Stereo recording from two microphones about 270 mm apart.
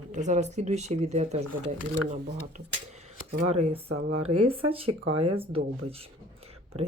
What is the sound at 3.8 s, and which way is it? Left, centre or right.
Speech, right.